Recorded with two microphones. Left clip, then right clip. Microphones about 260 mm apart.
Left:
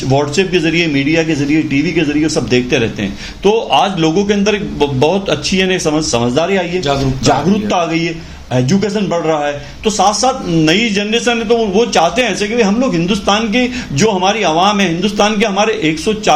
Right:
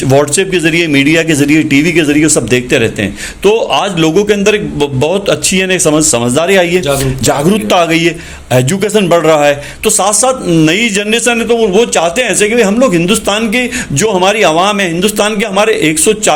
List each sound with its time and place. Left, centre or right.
0.1 s a man's voice: right